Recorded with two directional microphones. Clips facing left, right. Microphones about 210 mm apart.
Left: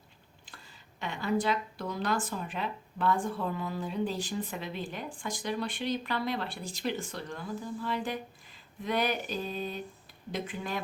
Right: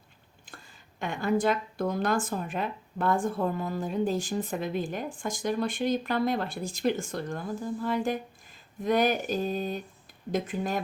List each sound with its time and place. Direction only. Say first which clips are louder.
0.4 s speech: right 4 dB; 50° right (ahead or behind)